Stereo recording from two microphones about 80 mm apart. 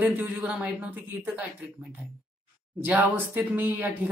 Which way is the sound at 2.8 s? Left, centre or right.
Centre.